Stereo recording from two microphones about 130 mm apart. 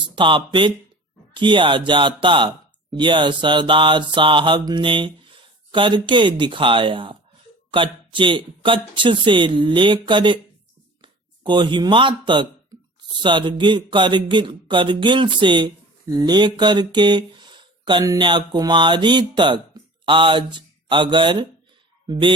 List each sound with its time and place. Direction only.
0.2 s speech: 40° right (ahead or behind)